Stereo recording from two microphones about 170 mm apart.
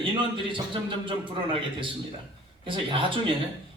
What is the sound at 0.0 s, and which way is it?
Speech, 30° right (ahead or behind).